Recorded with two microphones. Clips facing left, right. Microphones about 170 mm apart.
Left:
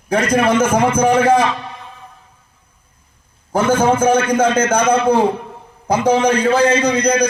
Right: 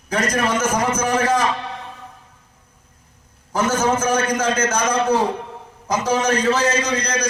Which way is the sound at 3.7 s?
30° left (ahead or behind).